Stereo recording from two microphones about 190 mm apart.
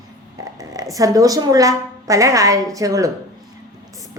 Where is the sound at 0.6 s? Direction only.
20° right (ahead or behind).